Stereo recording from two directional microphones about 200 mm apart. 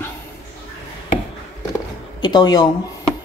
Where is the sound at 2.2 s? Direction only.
20° left (ahead or behind).